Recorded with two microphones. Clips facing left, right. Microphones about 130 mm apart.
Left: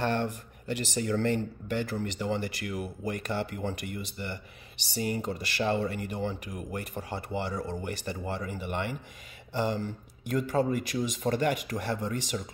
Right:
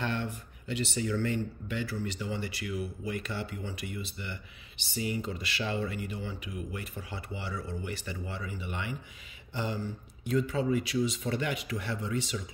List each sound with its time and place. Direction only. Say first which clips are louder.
0.0 s speech: left 5 dB; 40° left (ahead or behind)
10.3 s speech: left 1 dB; 45° left (ahead or behind)